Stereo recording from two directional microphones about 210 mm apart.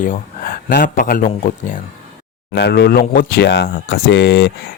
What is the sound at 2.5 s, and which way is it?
Speech, 55° left (ahead or behind).